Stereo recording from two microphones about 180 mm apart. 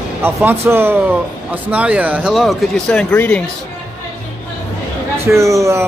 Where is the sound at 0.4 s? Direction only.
10° right (ahead or behind); by 3.4 s 10° left (ahead or behind).